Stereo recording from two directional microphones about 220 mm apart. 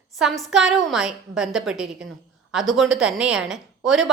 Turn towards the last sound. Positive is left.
turn(degrees=0)  # may be behind; listen again after turning